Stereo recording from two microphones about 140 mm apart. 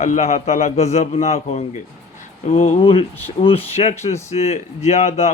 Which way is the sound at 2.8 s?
40° left (ahead or behind).